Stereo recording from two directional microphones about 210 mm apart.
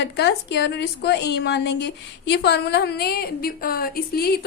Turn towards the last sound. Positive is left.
turn(degrees=50)  # may be behind; listen again after turning